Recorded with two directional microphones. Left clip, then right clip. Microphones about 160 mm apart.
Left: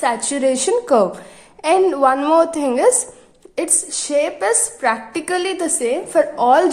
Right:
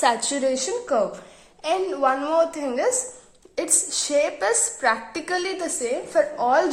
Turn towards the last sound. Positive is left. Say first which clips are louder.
# left 6 dB
turn(degrees=20)  # may be behind; listen again after turning